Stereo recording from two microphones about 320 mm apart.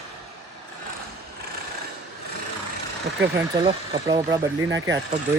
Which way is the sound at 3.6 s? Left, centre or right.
Centre.